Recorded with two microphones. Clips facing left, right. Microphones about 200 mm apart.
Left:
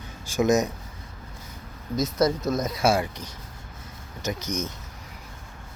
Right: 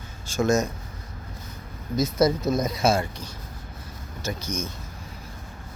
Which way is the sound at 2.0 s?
Centre (ahead or behind).